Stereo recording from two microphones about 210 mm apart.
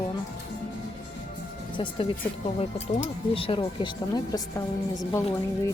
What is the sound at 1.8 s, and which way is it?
Speech, 25° left (ahead or behind).